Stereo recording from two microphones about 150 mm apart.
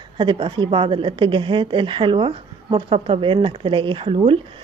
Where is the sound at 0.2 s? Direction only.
35° right (ahead or behind).